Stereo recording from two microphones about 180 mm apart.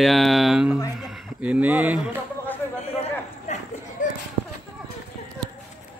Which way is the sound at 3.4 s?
40° left (ahead or behind).